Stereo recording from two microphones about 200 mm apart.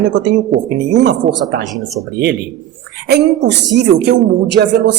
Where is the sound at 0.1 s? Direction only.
60° right (ahead or behind).